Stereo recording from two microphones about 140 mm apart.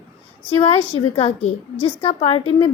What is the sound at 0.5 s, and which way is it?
A woman's voice, 45° left (ahead or behind).